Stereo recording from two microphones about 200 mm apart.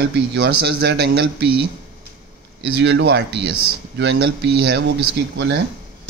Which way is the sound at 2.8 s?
60° right (ahead or behind).